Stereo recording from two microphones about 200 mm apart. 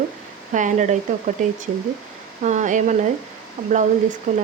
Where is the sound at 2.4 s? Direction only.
35° right (ahead or behind).